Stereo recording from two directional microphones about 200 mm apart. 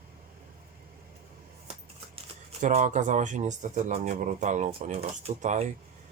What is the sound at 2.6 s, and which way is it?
Speech, 35° right (ahead or behind).